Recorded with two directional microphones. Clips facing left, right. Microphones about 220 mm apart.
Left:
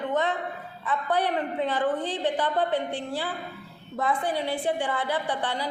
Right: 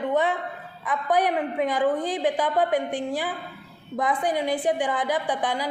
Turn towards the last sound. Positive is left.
turn(degrees=-15)  # may be behind; listen again after turning